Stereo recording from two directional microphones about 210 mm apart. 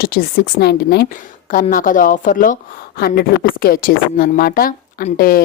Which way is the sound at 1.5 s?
40° left (ahead or behind).